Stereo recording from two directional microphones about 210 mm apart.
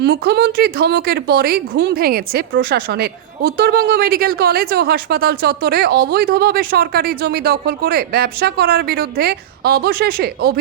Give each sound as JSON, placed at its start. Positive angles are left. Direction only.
{"t": 0.0, "sound": "a woman's voice", "side_deg": -50}